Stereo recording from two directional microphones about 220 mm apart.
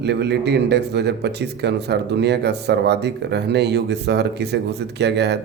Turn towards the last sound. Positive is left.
turn(degrees=-50)  # may be behind; listen again after turning